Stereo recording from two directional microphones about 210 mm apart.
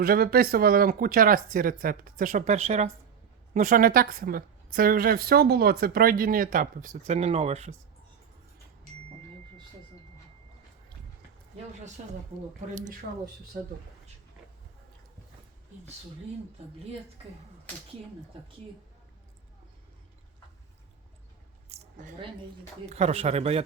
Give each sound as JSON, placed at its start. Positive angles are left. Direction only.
{"t": 0.0, "sound": "a woman's voice", "side_deg": -45}
{"t": 21.7, "sound": "a sound", "side_deg": -35}
{"t": 22.9, "sound": "a man's voice", "side_deg": -30}